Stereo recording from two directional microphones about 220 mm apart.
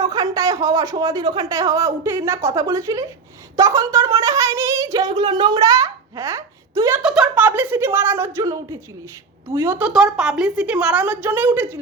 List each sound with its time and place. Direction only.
0.0 s speech: 15° right (ahead or behind)
7.0 s speech: centre (ahead or behind)